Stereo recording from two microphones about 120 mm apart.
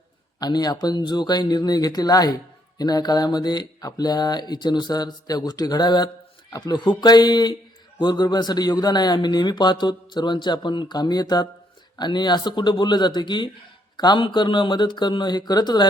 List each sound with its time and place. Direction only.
0.3 s speech: 35° left (ahead or behind)